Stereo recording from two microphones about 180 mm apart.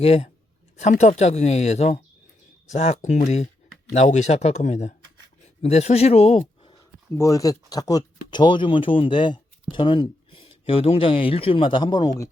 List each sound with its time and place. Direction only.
0.0 s speech: 35° left (ahead or behind)
7.1 s speech: 15° left (ahead or behind)